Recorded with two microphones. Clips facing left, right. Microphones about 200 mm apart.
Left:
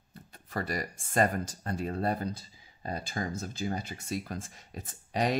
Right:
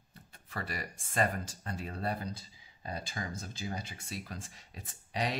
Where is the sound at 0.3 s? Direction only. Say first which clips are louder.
Left 7 dB; 40° left (ahead or behind).